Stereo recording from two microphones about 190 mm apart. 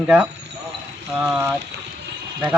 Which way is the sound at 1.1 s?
15° right (ahead or behind).